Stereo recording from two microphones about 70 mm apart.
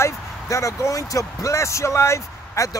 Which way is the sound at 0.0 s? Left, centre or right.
Left.